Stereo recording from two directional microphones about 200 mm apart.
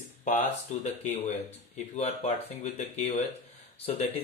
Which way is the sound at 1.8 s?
35° left (ahead or behind).